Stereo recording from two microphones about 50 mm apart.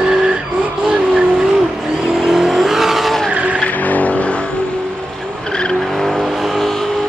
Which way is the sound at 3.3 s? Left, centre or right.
Right.